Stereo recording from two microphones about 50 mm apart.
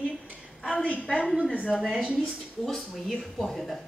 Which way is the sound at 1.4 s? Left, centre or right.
Left.